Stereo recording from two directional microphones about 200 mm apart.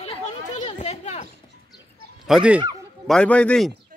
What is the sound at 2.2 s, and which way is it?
Speech, 5° right (ahead or behind).